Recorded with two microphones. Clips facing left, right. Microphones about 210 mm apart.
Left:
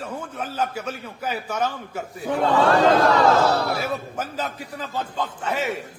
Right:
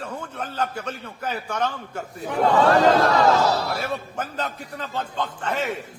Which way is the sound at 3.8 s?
5° left (ahead or behind).